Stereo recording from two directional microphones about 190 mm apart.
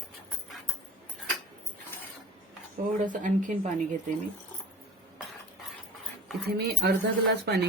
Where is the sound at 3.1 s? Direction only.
45° right (ahead or behind).